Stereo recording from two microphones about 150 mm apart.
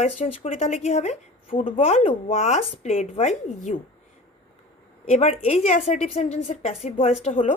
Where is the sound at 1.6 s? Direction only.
40° left (ahead or behind).